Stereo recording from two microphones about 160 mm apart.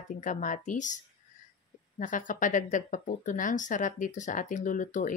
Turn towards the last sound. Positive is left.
turn(degrees=55)  # may be behind; listen again after turning